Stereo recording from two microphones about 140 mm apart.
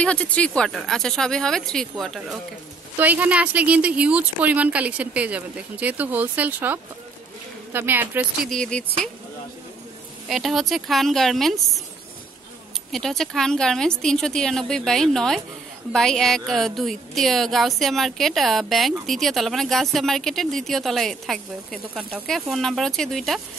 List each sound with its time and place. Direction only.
0.0 s a woman's voice: 10° left (ahead or behind)
3.0 s a woman's voice: 10° right (ahead or behind)
8.5 s speech: 5° left (ahead or behind)
10.2 s a woman's voice: centre (ahead or behind)
12.9 s a woman's voice: 5° left (ahead or behind)